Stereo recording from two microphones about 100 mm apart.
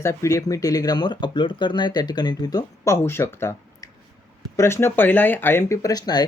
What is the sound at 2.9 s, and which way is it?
Speech, 25° left (ahead or behind).